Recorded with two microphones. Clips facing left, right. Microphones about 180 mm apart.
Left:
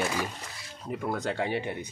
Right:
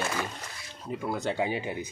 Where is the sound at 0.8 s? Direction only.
Centre (ahead or behind).